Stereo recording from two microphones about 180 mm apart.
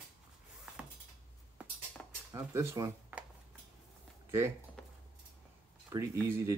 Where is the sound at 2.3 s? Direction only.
15° right (ahead or behind).